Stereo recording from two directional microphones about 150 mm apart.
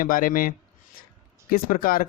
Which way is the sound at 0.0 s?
65° left (ahead or behind).